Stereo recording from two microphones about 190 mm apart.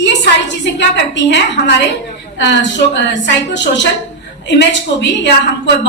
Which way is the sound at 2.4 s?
65° left (ahead or behind).